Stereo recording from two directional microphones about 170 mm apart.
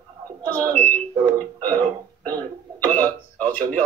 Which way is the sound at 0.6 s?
10° left (ahead or behind).